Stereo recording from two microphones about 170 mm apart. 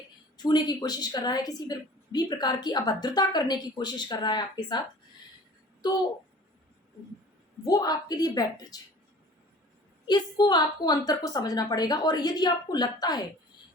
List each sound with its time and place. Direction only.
0.3 s a woman's voice: 25° left (ahead or behind)
7.6 s a woman's voice: 20° left (ahead or behind)
10.1 s a woman's voice: 25° left (ahead or behind)